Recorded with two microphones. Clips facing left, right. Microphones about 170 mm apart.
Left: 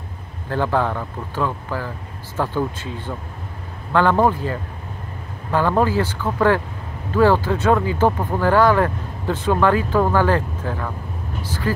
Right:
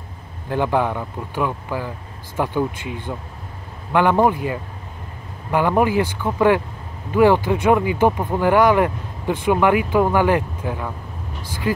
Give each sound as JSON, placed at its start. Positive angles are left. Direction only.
{"t": 0.5, "sound": "speech", "side_deg": -15}